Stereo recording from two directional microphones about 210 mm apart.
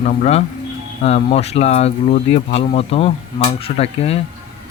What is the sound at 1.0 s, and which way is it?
Speech, 30° left (ahead or behind).